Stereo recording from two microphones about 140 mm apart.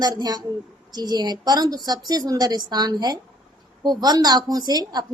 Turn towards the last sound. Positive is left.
turn(degrees=-30)  # may be behind; listen again after turning